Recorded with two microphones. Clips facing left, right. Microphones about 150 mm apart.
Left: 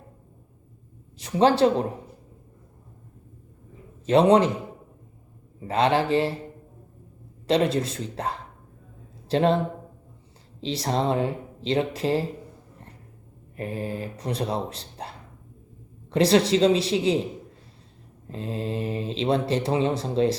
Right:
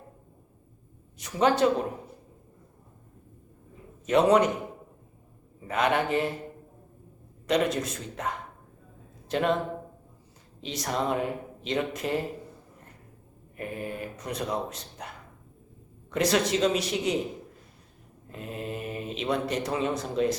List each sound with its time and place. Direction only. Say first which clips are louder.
1.2 s speech: left 4 dB; 30° left (ahead or behind)
4.0 s speech: left 3 dB; 30° left (ahead or behind)
5.6 s speech: left 4 dB; 30° left (ahead or behind)
7.4 s speech: left 4 dB; 30° left (ahead or behind)
10.6 s speech: left 4 dB; 30° left (ahead or behind)
13.6 s speech: left 4 dB; 30° left (ahead or behind)
18.3 s speech: left 5 dB; 30° left (ahead or behind)